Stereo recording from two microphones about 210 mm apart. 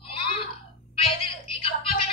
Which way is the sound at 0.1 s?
25° left (ahead or behind).